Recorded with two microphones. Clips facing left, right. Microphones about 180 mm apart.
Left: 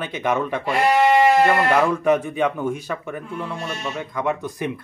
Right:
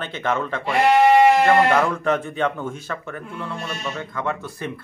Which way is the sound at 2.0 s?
10° left (ahead or behind).